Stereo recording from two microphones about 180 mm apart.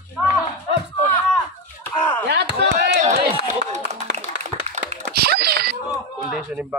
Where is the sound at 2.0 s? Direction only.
10° left (ahead or behind).